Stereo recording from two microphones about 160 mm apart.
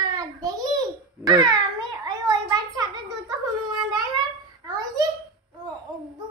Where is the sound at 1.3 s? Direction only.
25° right (ahead or behind).